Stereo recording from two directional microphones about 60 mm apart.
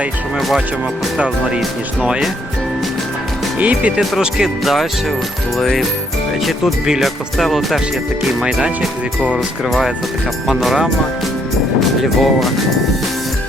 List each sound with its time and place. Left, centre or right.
0.3 s speech: centre
1.2 s speech: centre
3.6 s speech: right
4.2 s speech: centre
9.6 s speech: centre
11.8 s speech: centre